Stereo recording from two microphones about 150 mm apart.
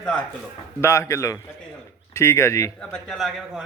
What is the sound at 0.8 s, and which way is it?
A man's voice, 20° left (ahead or behind).